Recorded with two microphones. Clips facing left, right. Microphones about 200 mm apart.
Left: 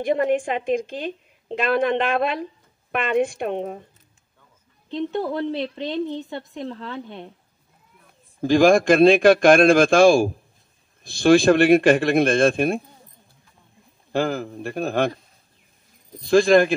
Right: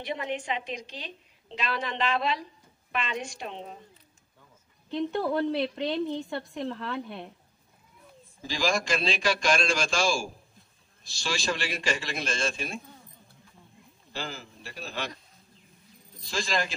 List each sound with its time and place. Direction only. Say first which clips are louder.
0.0 s a woman's voice: left 13 dB; 50° left (ahead or behind)
4.8 s a woman's voice: left 3 dB; 20° left (ahead or behind)
8.4 s a man's voice: left 14 dB; 55° left (ahead or behind)
14.1 s a man's voice: left 15 dB; 55° left (ahead or behind)
16.2 s a man's voice: left 16 dB; 55° left (ahead or behind)